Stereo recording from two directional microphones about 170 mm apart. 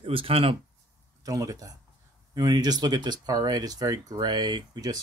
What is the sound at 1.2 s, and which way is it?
Speech, 20° right (ahead or behind).